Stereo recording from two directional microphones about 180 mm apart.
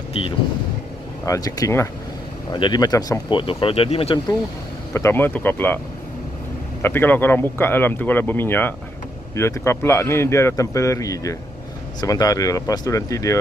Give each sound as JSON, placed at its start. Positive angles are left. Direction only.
{"t": 1.2, "sound": "speech", "side_deg": 20}
{"t": 4.9, "sound": "speech", "side_deg": 15}
{"t": 6.8, "sound": "speech", "side_deg": 10}